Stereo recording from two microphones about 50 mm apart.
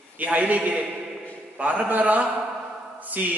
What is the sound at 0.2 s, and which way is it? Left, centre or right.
A man's voice, right.